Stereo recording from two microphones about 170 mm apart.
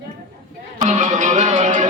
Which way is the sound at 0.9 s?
45° right (ahead or behind).